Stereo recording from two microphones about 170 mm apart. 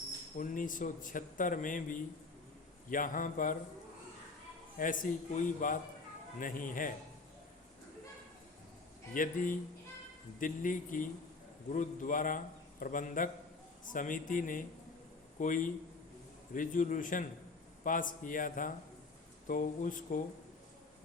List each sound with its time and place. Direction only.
0.3 s speech: 50° left (ahead or behind)
4.8 s speech: 50° left (ahead or behind)
9.1 s speech: 50° left (ahead or behind)